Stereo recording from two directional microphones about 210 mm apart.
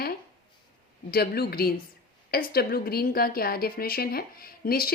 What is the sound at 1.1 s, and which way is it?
A woman's voice, 50° left (ahead or behind).